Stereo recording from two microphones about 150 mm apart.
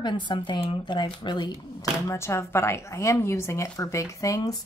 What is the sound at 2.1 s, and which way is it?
Speech, 20° left (ahead or behind).